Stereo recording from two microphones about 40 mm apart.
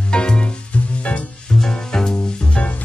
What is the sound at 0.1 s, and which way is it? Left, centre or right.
Music, left.